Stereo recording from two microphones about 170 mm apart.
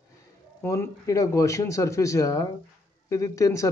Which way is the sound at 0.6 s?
15° left (ahead or behind).